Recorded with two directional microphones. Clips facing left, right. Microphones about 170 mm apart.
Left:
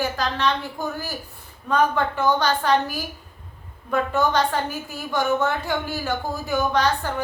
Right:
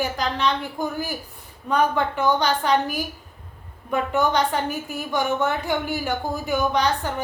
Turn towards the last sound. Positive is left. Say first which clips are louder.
# even
turn(degrees=-15)  # may be behind; listen again after turning